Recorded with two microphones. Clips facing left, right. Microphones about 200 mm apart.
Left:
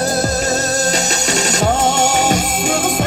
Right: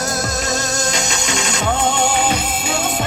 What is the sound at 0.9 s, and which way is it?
Music, 40° left (ahead or behind).